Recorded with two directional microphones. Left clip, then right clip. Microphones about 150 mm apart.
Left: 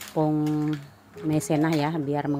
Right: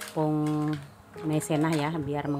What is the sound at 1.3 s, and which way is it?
A woman's voice, 15° left (ahead or behind).